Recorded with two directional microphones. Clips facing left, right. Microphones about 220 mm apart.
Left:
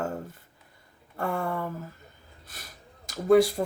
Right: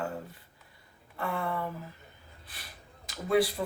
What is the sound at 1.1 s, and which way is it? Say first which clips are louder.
Speech: left 3 dB; 45° left (ahead or behind).